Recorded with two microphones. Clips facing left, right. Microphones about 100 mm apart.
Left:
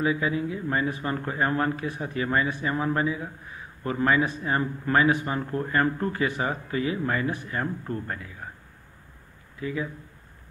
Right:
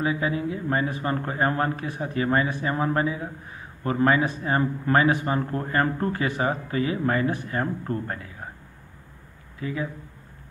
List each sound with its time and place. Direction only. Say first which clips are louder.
0.0 s speech: even; 30° right (ahead or behind)